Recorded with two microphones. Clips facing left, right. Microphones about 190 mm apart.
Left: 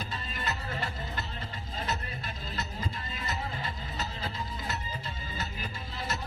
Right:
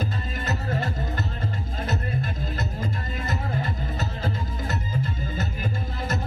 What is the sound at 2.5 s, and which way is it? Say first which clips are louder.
Music: right 7 dB; 50° right (ahead or behind).